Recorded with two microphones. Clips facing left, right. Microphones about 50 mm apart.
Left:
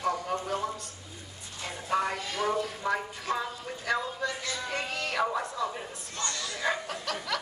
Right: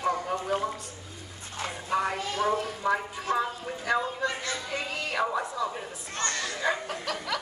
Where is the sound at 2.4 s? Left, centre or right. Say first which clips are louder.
Right 3 dB; right.